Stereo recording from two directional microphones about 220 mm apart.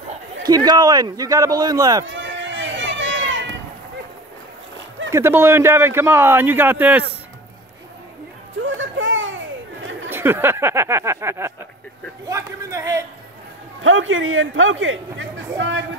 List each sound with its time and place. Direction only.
0.5 s speech: 20° right (ahead or behind)
2.1 s run: 55° right (ahead or behind)
5.1 s speech: 10° right (ahead or behind)
8.6 s a sound: 60° right (ahead or behind)
10.0 s speech: 10° right (ahead or behind)
13.8 s speech: 60° right (ahead or behind)